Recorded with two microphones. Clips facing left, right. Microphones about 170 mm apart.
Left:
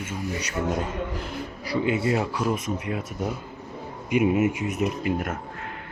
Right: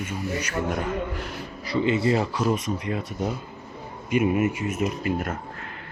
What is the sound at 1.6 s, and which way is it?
Speech, 10° left (ahead or behind).